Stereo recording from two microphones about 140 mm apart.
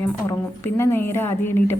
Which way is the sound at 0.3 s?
20° left (ahead or behind).